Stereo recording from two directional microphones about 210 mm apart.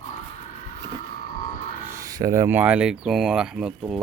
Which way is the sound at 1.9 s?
15° right (ahead or behind).